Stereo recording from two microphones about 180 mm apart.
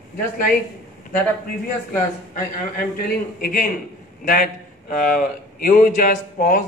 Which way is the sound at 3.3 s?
55° left (ahead or behind).